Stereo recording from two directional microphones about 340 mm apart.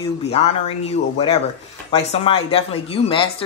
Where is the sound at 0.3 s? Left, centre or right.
Centre.